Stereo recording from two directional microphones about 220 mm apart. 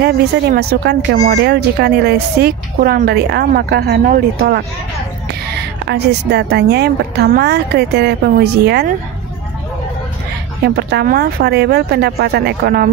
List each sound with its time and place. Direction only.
0.0 s speech: 45° right (ahead or behind)
10.6 s speech: 45° right (ahead or behind)